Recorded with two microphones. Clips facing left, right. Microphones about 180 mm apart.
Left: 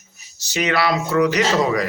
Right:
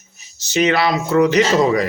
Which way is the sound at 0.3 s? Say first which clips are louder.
Right 4 dB; 25° right (ahead or behind).